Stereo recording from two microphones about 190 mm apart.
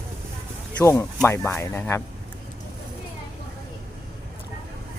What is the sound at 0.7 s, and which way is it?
Speech, 15° left (ahead or behind).